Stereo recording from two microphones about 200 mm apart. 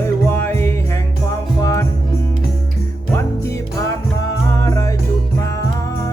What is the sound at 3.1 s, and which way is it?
Music, 15° left (ahead or behind).